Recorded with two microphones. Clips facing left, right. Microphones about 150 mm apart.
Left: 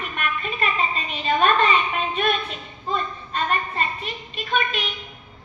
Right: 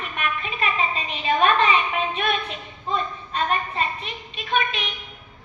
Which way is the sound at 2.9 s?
Centre (ahead or behind).